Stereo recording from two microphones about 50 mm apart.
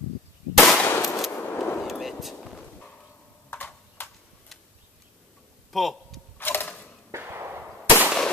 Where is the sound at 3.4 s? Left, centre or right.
Left.